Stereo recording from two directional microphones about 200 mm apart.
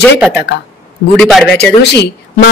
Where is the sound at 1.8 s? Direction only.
55° left (ahead or behind).